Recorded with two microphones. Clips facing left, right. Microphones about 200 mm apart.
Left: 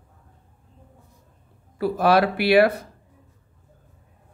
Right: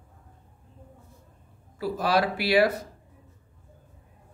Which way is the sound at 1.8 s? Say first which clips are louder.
Left 6 dB; 60° left (ahead or behind).